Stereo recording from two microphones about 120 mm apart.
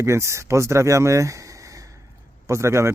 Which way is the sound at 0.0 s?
25° right (ahead or behind).